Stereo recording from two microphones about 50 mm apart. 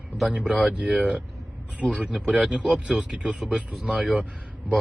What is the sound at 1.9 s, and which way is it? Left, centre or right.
Speech, right.